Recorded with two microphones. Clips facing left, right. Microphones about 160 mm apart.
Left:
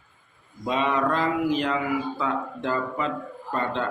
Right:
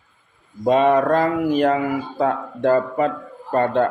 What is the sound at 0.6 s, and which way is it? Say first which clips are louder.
Speech: right 9 dB; 50° right (ahead or behind).